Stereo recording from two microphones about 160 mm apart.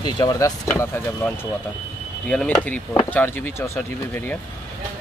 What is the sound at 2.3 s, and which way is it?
Speech, 5° left (ahead or behind).